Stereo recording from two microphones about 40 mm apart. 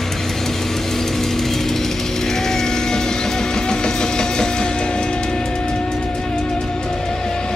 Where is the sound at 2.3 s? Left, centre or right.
Centre.